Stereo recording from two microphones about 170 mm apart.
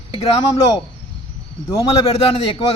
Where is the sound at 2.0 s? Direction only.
35° left (ahead or behind).